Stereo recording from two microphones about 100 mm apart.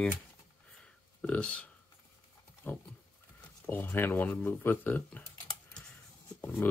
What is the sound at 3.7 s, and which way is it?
Speech, 20° left (ahead or behind).